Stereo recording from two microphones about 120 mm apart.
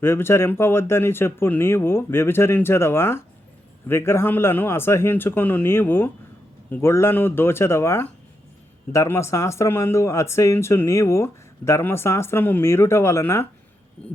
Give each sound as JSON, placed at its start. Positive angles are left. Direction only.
{"t": 0.0, "sound": "speech", "side_deg": 20}